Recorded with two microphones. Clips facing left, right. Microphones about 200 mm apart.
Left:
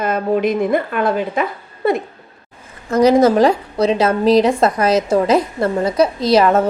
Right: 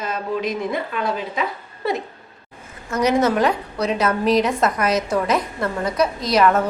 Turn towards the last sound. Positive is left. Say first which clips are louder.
# left 4 dB
turn(degrees=25)  # may be behind; listen again after turning